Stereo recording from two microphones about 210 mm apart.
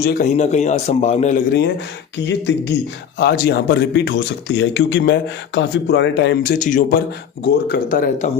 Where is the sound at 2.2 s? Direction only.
55° left (ahead or behind).